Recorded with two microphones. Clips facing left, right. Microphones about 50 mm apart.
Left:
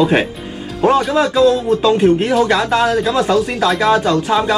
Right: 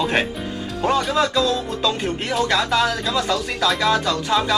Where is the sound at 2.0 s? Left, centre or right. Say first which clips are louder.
Left 10 dB; centre.